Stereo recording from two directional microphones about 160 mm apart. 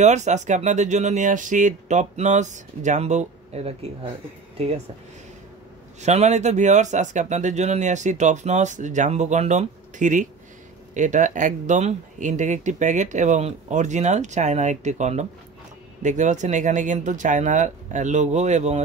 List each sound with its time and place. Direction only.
0.0 s speech: 45° right (ahead or behind)
5.9 s speech: 45° right (ahead or behind)